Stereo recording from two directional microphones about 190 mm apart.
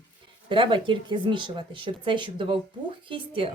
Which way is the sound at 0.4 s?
25° right (ahead or behind).